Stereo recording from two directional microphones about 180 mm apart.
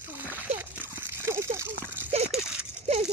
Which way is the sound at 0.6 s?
10° right (ahead or behind).